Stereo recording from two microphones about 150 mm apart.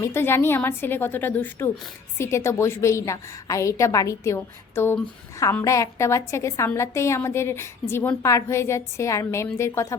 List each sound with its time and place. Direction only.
0.0 s a woman's voice: 15° left (ahead or behind)